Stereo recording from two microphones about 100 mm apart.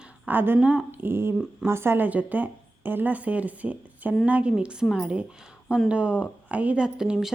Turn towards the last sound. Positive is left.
turn(degrees=-5)  # may be behind; listen again after turning